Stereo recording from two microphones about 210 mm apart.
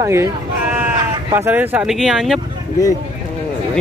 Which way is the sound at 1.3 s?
10° right (ahead or behind).